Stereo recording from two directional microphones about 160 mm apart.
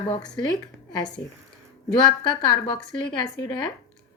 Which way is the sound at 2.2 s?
30° left (ahead or behind).